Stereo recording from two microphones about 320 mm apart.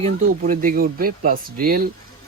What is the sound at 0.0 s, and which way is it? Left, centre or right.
Speech, right.